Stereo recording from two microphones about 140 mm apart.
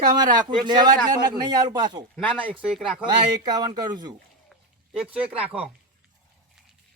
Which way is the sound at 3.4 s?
30° right (ahead or behind).